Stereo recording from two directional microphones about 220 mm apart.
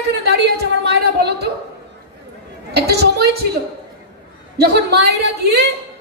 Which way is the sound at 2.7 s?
45° right (ahead or behind).